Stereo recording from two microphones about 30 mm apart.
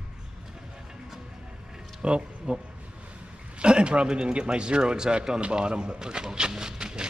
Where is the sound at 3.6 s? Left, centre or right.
Right.